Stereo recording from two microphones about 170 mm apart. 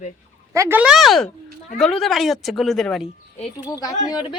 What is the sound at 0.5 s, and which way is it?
A woman's voice, 15° right (ahead or behind).